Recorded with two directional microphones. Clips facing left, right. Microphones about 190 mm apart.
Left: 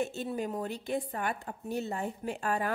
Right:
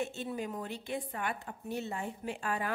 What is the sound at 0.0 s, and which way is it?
A woman's voice, 40° left (ahead or behind).